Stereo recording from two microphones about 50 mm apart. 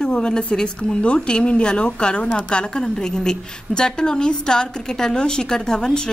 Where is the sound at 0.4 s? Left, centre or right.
Centre.